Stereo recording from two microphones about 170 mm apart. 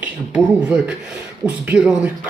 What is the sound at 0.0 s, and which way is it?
Speech, 5° right (ahead or behind).